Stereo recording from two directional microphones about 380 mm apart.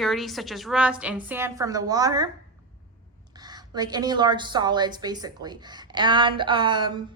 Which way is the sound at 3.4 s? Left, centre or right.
Centre.